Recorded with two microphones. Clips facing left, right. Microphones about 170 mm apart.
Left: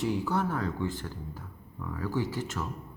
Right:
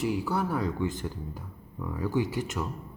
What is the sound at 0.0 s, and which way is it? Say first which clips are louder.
Speech: even; 5° right (ahead or behind).